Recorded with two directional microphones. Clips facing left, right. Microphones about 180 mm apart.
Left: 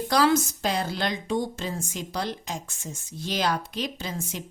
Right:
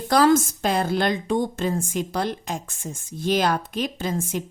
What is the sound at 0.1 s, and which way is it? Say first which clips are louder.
A woman's voice: right 5 dB; 50° right (ahead or behind).